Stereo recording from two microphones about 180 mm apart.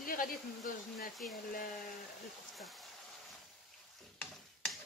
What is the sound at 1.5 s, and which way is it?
Speech, 50° left (ahead or behind).